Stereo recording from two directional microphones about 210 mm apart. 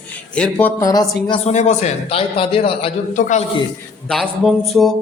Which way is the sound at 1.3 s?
30° left (ahead or behind).